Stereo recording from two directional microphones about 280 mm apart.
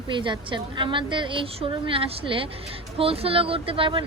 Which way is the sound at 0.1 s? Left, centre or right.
Centre.